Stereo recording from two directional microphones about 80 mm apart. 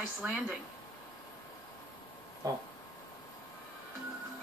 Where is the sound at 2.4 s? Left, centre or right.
Right.